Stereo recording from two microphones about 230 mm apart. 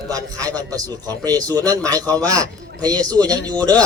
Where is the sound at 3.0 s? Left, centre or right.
Centre.